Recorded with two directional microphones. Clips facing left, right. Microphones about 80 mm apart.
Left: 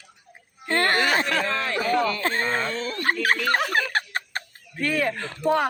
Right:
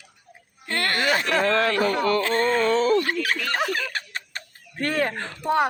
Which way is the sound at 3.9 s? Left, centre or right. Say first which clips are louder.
Left 6 dB; left.